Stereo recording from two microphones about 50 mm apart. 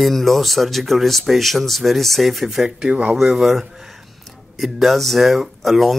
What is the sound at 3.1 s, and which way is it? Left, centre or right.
Speech, centre.